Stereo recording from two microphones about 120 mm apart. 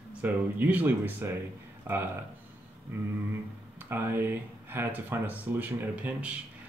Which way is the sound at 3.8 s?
20° right (ahead or behind).